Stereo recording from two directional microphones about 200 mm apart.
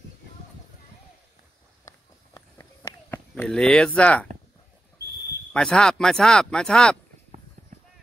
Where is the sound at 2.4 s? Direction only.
15° left (ahead or behind).